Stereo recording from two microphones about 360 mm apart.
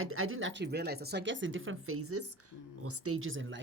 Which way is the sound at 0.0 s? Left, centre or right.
Right.